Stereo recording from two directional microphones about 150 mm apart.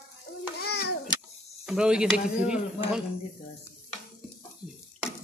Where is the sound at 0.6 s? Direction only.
90° left.